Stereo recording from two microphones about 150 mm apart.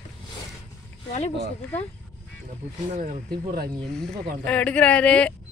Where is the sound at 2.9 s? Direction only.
70° right (ahead or behind).